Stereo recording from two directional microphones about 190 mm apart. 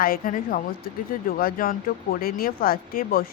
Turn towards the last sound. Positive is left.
turn(degrees=50)  # may be behind; listen again after turning